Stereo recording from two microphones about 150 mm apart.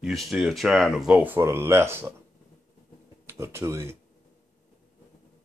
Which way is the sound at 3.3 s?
15° right (ahead or behind).